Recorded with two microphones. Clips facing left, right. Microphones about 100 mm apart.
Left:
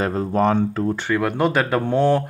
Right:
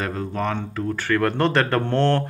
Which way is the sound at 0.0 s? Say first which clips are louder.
Left 6 dB; 30° left (ahead or behind).